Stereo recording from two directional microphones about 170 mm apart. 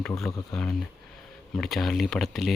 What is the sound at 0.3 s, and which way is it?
Speech, 25° left (ahead or behind).